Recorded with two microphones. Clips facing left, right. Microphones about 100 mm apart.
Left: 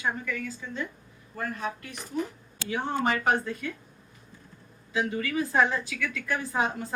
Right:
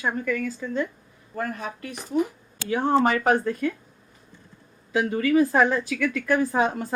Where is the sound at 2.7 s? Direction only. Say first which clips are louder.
Right 7 dB; 50° right (ahead or behind).